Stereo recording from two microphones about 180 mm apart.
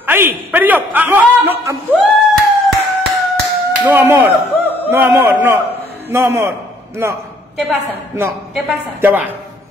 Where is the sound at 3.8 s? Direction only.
10° right (ahead or behind).